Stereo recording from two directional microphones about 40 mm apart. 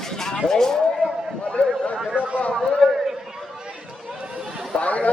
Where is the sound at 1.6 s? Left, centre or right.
Left.